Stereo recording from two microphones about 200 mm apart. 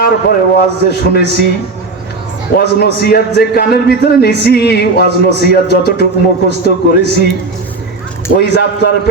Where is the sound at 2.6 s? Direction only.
55° left (ahead or behind).